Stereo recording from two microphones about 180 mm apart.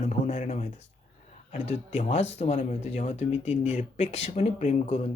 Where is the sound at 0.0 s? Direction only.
40° left (ahead or behind).